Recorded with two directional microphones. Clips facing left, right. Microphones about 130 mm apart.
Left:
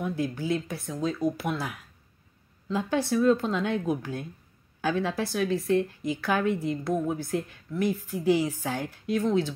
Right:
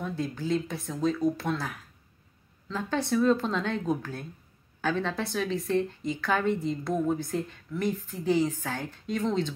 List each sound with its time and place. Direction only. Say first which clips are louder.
0.0 s a woman's voice: left 2 dB; 10° left (ahead or behind)